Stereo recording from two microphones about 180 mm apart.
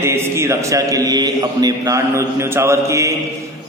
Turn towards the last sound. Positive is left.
turn(degrees=-15)  # may be behind; listen again after turning